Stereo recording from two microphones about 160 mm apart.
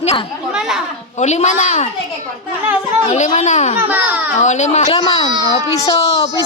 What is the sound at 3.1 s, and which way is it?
Speech, 45° left (ahead or behind).